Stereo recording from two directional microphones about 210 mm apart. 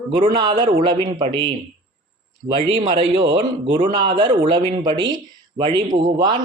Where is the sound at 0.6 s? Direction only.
30° right (ahead or behind).